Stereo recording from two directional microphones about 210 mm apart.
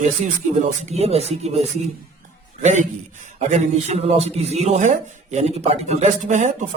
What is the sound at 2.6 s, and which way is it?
A man's voice, 35° right (ahead or behind).